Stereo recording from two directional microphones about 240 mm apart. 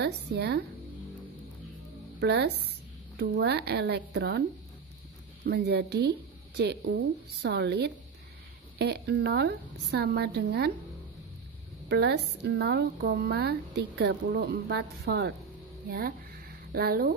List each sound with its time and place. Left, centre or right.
0.0 s speech: right
2.1 s a woman's voice: right
11.9 s speech: right
15.9 s a sound: right